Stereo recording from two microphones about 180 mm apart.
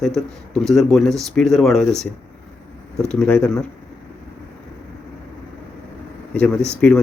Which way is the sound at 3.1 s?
5° left (ahead or behind).